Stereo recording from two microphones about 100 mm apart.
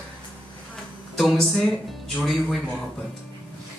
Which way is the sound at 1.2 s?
Centre (ahead or behind).